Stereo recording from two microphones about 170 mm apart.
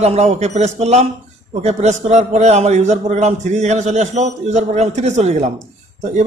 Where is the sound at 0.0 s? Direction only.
40° right (ahead or behind).